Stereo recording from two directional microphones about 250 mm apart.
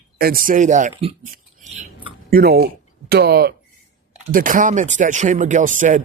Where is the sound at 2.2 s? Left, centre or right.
Right.